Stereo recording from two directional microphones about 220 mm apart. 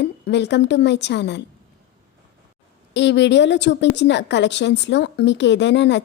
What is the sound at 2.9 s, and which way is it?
A woman's voice, 55° left (ahead or behind).